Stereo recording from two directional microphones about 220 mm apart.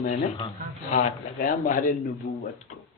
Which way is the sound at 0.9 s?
35° left (ahead or behind).